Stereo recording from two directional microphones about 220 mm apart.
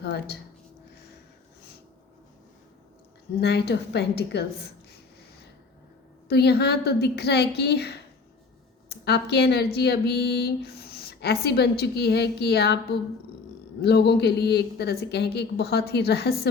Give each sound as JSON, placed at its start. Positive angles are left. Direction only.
{"t": 0.0, "sound": "speech", "side_deg": 50}
{"t": 3.4, "sound": "speech", "side_deg": 50}
{"t": 6.2, "sound": "speech", "side_deg": 45}